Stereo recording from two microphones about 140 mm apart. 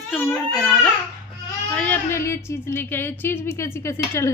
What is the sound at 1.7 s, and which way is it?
Speech, 10° left (ahead or behind).